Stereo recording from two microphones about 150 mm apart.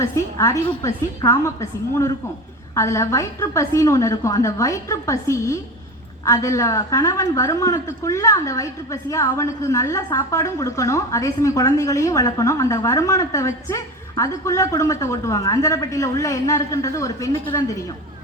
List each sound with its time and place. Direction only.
0.0 s a woman's voice: 20° left (ahead or behind)